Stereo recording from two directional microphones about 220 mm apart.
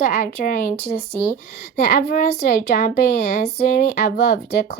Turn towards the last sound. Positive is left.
turn(degrees=45)  # may be behind; listen again after turning